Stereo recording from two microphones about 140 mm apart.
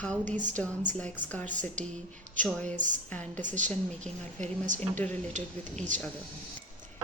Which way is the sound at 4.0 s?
60° right (ahead or behind).